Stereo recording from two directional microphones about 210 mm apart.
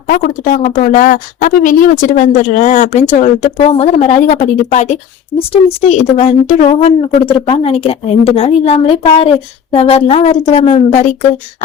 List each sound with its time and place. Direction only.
0.1 s speech: 40° left (ahead or behind)